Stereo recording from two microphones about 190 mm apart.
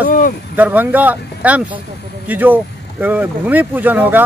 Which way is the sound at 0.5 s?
10° right (ahead or behind).